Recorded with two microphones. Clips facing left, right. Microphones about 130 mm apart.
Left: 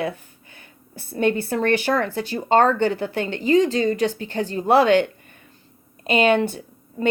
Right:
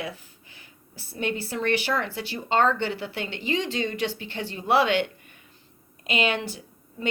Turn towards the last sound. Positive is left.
turn(degrees=50)  # may be behind; listen again after turning